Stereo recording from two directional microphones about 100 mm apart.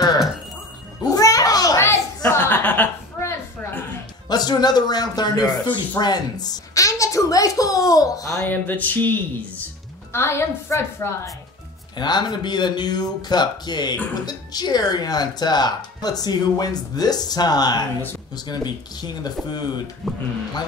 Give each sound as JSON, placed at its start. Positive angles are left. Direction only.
{"t": 1.0, "sound": "a sound", "side_deg": 35}
{"t": 2.2, "sound": "a sound", "side_deg": 20}
{"t": 4.3, "sound": "speech", "side_deg": 45}
{"t": 8.5, "sound": "a woman's voice", "side_deg": 15}
{"t": 12.0, "sound": "speech", "side_deg": 45}
{"t": 20.0, "sound": "speech", "side_deg": 0}